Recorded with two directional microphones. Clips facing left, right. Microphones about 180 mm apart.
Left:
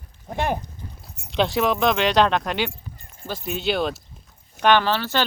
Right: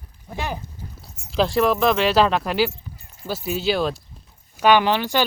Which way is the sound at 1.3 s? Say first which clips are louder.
Right 2 dB; centre (ahead or behind).